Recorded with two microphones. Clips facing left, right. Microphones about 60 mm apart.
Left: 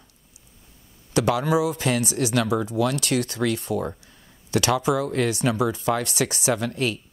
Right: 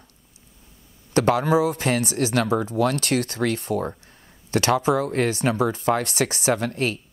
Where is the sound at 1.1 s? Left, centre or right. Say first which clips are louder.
Right 2 dB; right.